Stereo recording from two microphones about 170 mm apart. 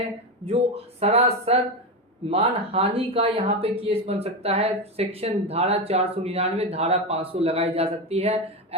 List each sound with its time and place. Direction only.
0.4 s speech: 35° right (ahead or behind)